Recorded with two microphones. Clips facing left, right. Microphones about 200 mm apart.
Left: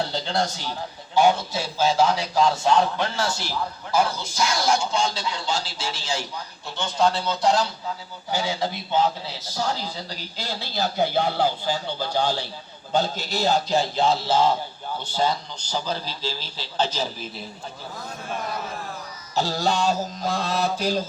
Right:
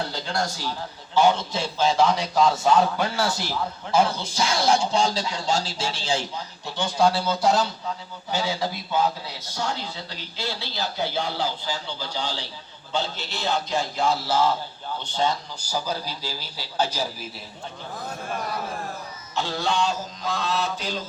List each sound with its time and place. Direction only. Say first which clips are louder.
0.1 s a man's voice: left 3 dB; 30° left (ahead or behind); by 3.4 s 15° right (ahead or behind)
3.9 s speech: right 1 dB; 30° right (ahead or behind)
6.7 s a man's voice: right 1 dB; 15° right (ahead or behind)
8.4 s a man's voice: even; 20° left (ahead or behind); by 12.4 s 55° left (ahead or behind)
12.9 s speech: left 5 dB; 40° left (ahead or behind)
15.0 s a man's voice: left 1 dB; 5° left (ahead or behind)
15.6 s a man's voice: even; 10° right (ahead or behind)
19.3 s speech: left 3 dB; 40° left (ahead or behind)